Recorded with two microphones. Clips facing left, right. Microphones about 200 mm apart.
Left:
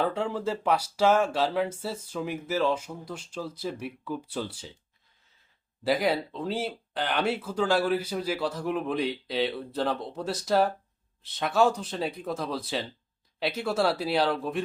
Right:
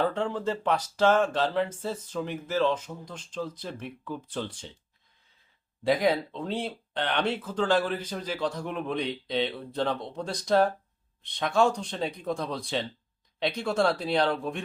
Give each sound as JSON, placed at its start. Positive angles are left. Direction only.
{"t": 0.0, "sound": "speech", "side_deg": 5}
{"t": 5.8, "sound": "speech", "side_deg": 0}